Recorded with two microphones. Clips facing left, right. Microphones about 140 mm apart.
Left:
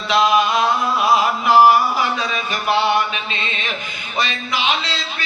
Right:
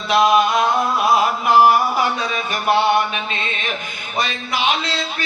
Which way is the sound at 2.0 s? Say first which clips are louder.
Right 1 dB; 50° right (ahead or behind).